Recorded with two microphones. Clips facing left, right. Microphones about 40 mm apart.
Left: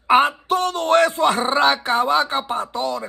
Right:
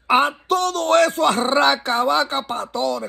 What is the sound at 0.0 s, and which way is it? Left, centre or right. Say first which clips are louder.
A man's voice: left 2 dB; left.